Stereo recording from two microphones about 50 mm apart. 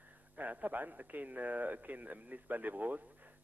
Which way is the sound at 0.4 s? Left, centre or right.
Right.